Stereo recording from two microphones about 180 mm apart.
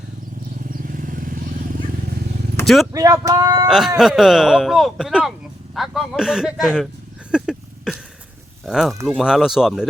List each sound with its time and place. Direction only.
0.7 s vehicle: 50° right (ahead or behind)
2.6 s vehicle: 15° left (ahead or behind)
2.9 s speech: 20° right (ahead or behind)
3.7 s speech: centre (ahead or behind)
7.3 s a sound: 5° right (ahead or behind)
8.6 s speech: centre (ahead or behind)